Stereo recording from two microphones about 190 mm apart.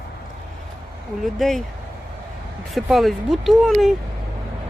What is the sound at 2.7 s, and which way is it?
Speech, centre (ahead or behind).